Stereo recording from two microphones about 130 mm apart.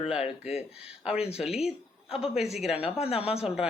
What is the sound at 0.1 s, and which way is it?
Speech, 5° right (ahead or behind).